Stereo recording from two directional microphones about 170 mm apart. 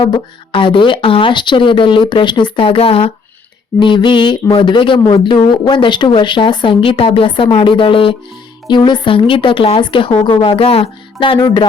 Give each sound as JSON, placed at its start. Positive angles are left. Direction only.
{"t": 0.0, "sound": "speech", "side_deg": 25}